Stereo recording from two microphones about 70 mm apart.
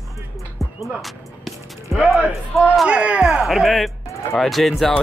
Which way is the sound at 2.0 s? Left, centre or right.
Centre.